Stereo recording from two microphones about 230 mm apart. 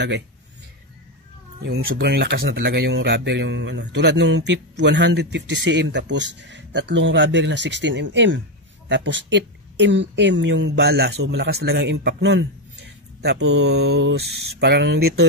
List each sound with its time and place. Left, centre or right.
1.6 s speech: right